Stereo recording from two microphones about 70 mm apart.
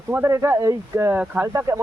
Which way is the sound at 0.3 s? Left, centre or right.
Right.